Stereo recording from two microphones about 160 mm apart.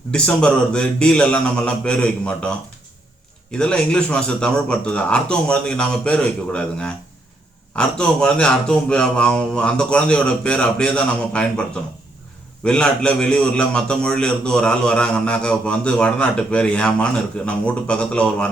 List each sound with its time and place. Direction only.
0.1 s speech: 5° left (ahead or behind)
3.6 s speech: 5° left (ahead or behind)
12.6 s a man's voice: 5° left (ahead or behind)